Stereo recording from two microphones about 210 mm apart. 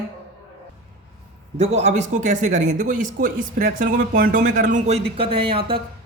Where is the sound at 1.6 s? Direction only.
30° right (ahead or behind).